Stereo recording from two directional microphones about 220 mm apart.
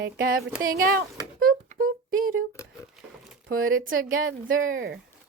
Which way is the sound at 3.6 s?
65° right (ahead or behind).